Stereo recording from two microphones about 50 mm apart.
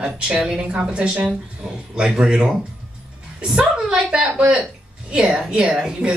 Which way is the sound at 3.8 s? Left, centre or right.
Centre.